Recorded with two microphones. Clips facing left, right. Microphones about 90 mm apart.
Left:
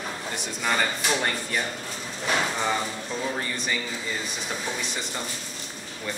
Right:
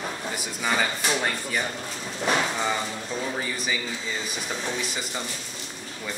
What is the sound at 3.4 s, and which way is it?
Speech, 5° right (ahead or behind).